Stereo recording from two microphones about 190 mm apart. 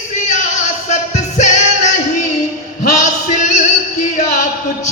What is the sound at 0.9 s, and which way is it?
Music, 40° left (ahead or behind).